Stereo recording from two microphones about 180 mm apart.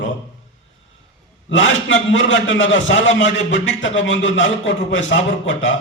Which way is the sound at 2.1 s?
90° left.